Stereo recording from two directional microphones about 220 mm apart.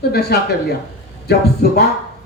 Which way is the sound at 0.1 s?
45° left (ahead or behind).